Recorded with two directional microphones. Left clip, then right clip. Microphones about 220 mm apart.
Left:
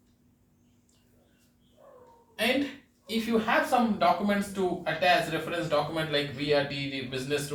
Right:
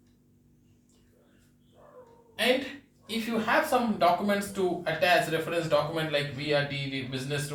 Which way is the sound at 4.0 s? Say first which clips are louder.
Right 1 dB; 15° left (ahead or behind).